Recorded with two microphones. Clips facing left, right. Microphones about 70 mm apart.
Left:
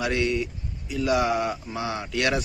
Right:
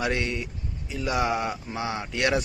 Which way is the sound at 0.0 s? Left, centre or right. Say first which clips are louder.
Left 3 dB; right.